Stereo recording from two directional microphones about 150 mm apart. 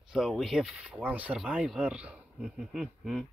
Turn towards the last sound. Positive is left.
turn(degrees=-5)  # may be behind; listen again after turning